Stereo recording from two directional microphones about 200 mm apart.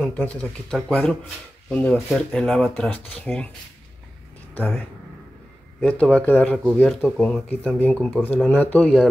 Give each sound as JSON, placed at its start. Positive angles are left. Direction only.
{"t": 0.0, "sound": "speech", "side_deg": 5}
{"t": 5.8, "sound": "speech", "side_deg": 5}